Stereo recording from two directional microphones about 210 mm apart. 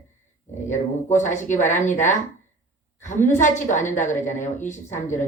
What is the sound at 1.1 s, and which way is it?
A woman's voice, 35° left (ahead or behind).